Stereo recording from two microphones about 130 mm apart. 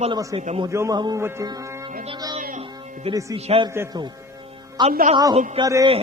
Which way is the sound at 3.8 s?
20° right (ahead or behind).